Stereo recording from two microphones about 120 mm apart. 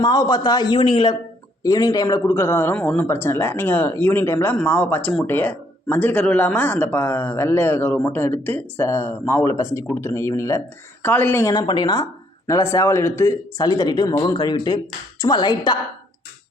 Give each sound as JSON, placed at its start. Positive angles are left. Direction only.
{"t": 0.0, "sound": "speech", "side_deg": 30}
{"t": 11.5, "sound": "speech", "side_deg": 35}
{"t": 13.7, "sound": "speech", "side_deg": 35}